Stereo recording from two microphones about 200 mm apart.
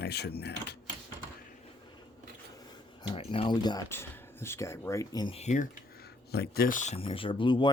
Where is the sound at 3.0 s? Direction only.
25° left (ahead or behind).